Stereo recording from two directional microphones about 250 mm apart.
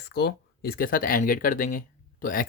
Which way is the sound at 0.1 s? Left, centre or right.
Left.